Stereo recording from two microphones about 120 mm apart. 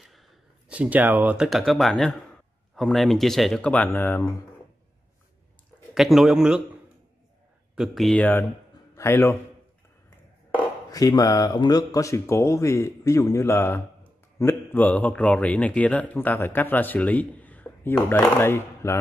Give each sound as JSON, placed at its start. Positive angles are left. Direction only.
{"t": 0.0, "sound": "a sound", "side_deg": 0}
{"t": 0.7, "sound": "speech", "side_deg": -10}
{"t": 5.9, "sound": "speech", "side_deg": 0}
{"t": 7.7, "sound": "speech", "side_deg": 0}
{"t": 8.2, "sound": "a man's voice", "side_deg": 15}
{"t": 10.9, "sound": "a man's voice", "side_deg": 30}